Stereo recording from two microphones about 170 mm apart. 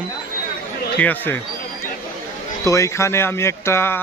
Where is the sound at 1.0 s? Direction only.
10° left (ahead or behind).